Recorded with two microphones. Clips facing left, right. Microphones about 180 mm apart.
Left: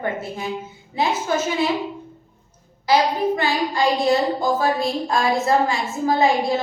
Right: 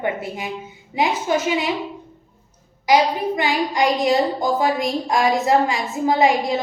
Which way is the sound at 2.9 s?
15° right (ahead or behind).